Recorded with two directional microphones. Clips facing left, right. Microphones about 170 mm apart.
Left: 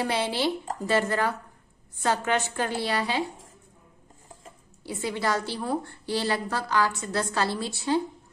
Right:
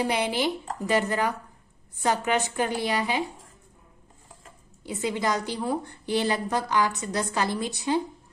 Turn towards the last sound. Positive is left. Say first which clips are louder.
# even
turn(degrees=-15)  # may be behind; listen again after turning